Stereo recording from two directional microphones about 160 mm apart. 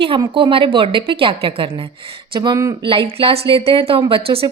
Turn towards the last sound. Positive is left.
turn(degrees=-35)  # may be behind; listen again after turning